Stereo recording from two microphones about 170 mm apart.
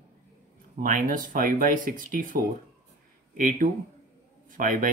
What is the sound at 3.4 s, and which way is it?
A man's voice, 55° right (ahead or behind).